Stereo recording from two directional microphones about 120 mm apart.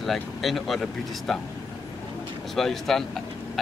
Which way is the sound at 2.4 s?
Centre (ahead or behind).